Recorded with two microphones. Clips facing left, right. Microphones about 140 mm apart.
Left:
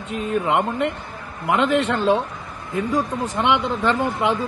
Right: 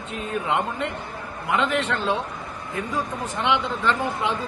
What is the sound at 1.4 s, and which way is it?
Speech, 50° left (ahead or behind).